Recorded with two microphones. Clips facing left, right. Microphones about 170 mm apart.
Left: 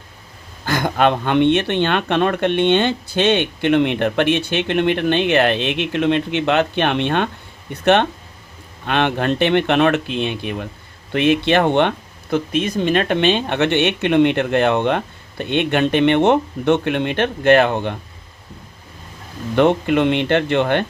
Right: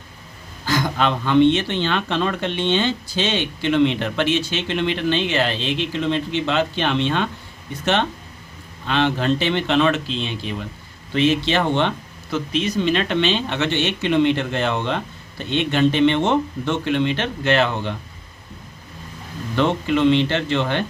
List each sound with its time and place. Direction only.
0.6 s speech: 55° left (ahead or behind)
19.5 s speech: 55° left (ahead or behind)